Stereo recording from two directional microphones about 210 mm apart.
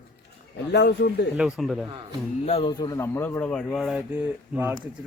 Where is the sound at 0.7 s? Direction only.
50° left (ahead or behind).